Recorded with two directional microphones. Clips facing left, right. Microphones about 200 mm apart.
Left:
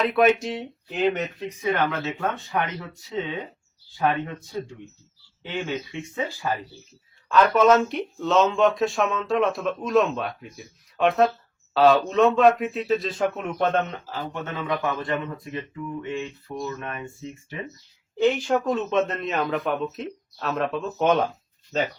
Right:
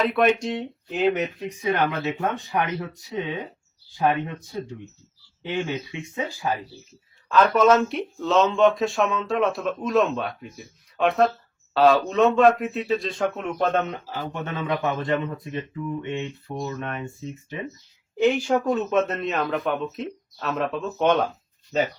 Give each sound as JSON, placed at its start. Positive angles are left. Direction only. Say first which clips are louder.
{"t": 0.0, "sound": "speech", "louder": "left 1 dB", "side_deg": 0}
{"t": 7.3, "sound": "speech", "louder": "even", "side_deg": 0}
{"t": 14.3, "sound": "speech", "louder": "right 1 dB", "side_deg": -15}
{"t": 18.2, "sound": "speech", "louder": "right 1 dB", "side_deg": -10}